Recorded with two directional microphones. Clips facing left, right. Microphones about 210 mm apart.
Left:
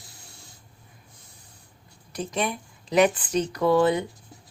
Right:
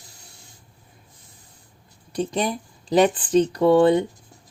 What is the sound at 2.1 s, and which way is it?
Speech, 30° right (ahead or behind).